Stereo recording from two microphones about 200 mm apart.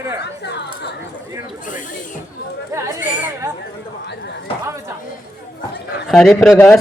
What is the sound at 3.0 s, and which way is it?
Chatter, 40° left (ahead or behind).